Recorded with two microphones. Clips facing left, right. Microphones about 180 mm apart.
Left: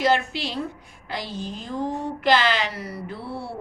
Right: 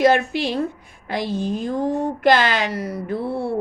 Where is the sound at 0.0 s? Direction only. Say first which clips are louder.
Right 5 dB; 50° right (ahead or behind).